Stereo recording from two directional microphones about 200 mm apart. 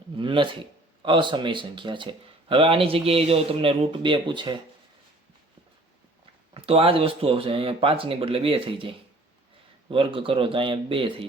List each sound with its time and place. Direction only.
0.2 s speech: 25° right (ahead or behind)
6.5 s speech: 30° right (ahead or behind)